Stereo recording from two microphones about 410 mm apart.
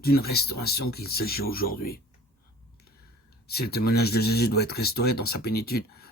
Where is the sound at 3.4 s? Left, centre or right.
Left.